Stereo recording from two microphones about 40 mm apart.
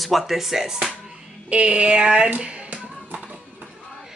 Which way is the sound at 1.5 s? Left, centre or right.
Right.